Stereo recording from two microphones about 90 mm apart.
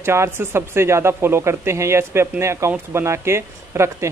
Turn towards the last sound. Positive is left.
turn(degrees=-30)  # may be behind; listen again after turning